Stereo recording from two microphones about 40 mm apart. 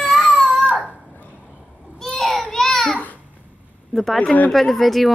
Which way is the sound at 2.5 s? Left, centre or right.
Centre.